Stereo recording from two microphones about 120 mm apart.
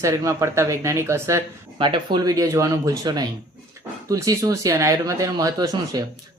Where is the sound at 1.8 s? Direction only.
40° right (ahead or behind).